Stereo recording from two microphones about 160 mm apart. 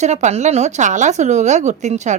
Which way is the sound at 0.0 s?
45° right (ahead or behind).